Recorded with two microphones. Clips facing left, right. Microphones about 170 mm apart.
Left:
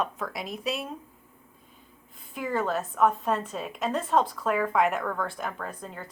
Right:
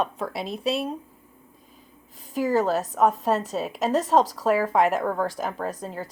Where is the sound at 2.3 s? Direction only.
40° right (ahead or behind).